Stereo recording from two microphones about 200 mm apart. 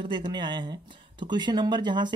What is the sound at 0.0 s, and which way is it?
Speech, 25° right (ahead or behind).